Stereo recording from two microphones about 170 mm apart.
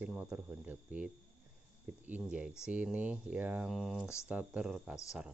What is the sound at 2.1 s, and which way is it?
Speech, 5° right (ahead or behind).